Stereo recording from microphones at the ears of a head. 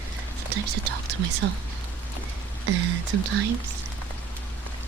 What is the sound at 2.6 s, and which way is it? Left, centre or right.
Speech, right.